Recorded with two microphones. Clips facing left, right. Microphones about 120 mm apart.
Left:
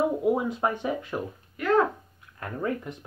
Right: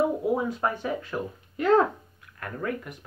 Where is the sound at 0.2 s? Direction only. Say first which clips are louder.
Left 1 dB; 15° left (ahead or behind).